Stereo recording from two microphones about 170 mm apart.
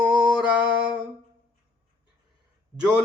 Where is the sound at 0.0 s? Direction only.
5° right (ahead or behind).